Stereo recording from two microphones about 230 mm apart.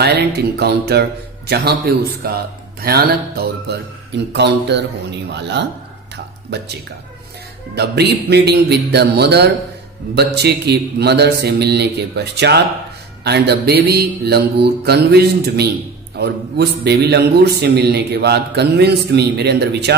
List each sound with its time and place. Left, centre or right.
0.0 s a man's voice: right
7.7 s a man's voice: right